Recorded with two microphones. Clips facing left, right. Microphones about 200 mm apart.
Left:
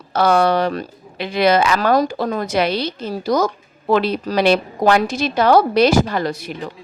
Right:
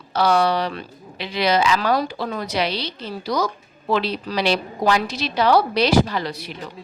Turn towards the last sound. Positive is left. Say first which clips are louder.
# left 3 dB
turn(degrees=50)  # may be behind; listen again after turning